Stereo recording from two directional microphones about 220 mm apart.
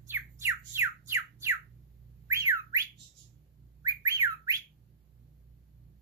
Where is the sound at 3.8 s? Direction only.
15° right (ahead or behind).